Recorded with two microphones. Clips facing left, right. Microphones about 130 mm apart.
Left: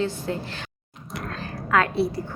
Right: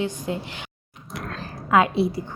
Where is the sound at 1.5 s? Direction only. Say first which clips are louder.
Right 3 dB; 20° right (ahead or behind).